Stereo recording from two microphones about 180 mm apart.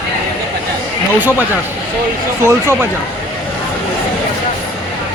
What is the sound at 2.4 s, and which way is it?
Speech, 15° right (ahead or behind).